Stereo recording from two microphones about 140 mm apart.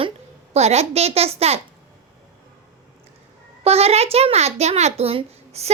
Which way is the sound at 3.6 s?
45° right (ahead or behind).